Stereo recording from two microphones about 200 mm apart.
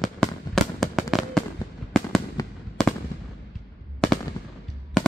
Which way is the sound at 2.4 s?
15° left (ahead or behind).